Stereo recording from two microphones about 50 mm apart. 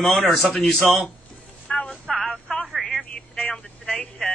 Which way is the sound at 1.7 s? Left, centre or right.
Centre.